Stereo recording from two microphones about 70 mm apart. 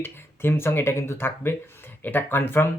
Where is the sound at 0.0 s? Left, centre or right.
Left.